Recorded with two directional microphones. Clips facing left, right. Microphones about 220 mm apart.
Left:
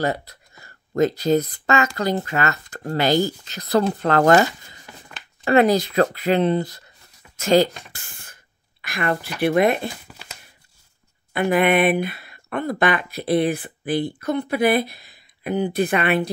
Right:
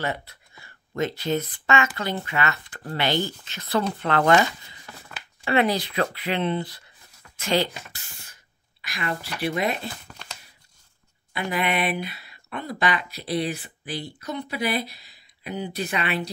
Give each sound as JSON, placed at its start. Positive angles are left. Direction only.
{"t": 0.0, "sound": "speech", "side_deg": 40}
{"t": 10.2, "sound": "a sound", "side_deg": 10}
{"t": 11.3, "sound": "speech", "side_deg": 55}